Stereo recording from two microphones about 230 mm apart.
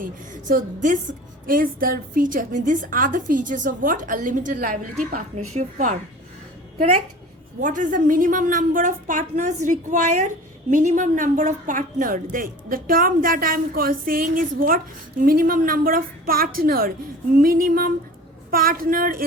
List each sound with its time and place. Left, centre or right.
0.0 s a woman's voice: right
7.6 s a woman's voice: right